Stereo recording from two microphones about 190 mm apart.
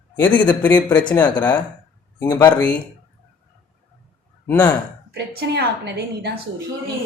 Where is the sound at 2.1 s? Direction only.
20° left (ahead or behind).